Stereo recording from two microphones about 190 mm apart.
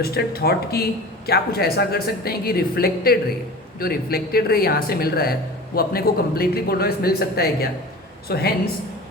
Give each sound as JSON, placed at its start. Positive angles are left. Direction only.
{"t": 0.0, "sound": "speech", "side_deg": 55}